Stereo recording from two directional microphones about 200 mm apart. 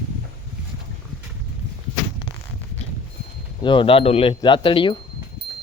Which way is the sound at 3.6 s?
25° left (ahead or behind).